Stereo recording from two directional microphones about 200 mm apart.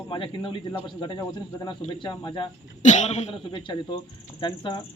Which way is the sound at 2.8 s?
35° left (ahead or behind).